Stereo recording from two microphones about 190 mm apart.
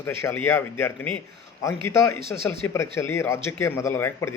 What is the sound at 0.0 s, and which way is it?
A man's voice, 15° left (ahead or behind).